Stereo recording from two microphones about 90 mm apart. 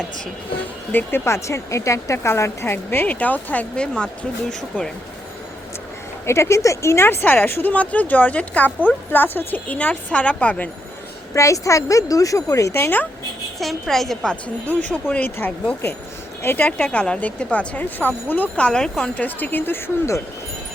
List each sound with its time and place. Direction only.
0.9 s speech: 30° left (ahead or behind); by 4.9 s 10° left (ahead or behind)
6.2 s speech: 30° left (ahead or behind); by 10.7 s 15° left (ahead or behind)
11.3 s speech: 35° left (ahead or behind)
13.6 s a woman's voice: centre (ahead or behind)
19.1 s speech: 20° left (ahead or behind)